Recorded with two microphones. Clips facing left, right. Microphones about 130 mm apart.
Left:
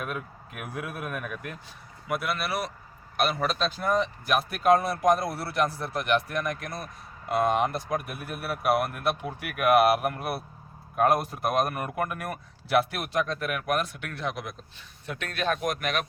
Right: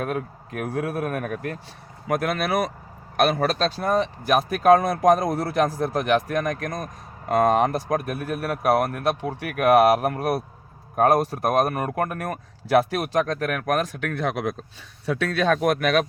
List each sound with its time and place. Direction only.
0.0 s speech: 40° right (ahead or behind); by 14.5 s 65° right (ahead or behind)
15.0 s speech: 90° right